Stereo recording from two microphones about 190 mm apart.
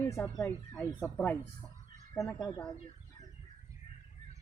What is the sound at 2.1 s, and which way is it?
Speech, 15° left (ahead or behind).